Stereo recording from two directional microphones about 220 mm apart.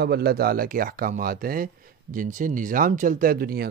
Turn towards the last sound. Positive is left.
turn(degrees=-40)  # may be behind; listen again after turning